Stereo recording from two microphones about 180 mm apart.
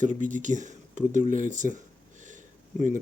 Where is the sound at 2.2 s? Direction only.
45° right (ahead or behind).